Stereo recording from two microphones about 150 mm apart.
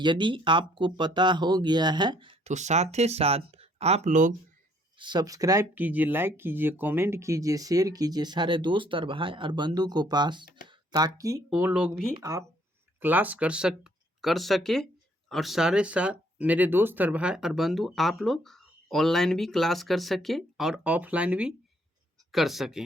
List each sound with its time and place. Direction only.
0.0 s speech: 30° right (ahead or behind); by 4.4 s 55° right (ahead or behind)
4.9 s speech: 30° right (ahead or behind); by 22.8 s centre (ahead or behind)